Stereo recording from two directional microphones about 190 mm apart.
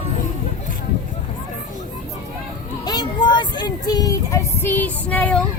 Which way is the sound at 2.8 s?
25° left (ahead or behind).